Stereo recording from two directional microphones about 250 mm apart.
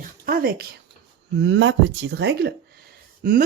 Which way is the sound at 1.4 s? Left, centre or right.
Right.